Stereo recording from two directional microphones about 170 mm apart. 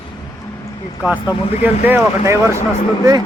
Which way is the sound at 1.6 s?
15° right (ahead or behind).